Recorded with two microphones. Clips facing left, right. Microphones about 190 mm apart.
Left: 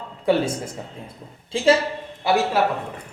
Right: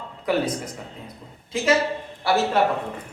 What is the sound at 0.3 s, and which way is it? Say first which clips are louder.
A woman's voice: left 3 dB; 30° left (ahead or behind).